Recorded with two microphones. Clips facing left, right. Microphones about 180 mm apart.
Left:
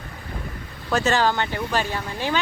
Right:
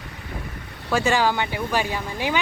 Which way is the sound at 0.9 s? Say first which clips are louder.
Even; 10° right (ahead or behind).